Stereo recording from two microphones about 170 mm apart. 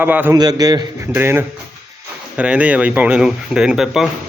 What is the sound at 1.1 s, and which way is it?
Speech, 10° right (ahead or behind).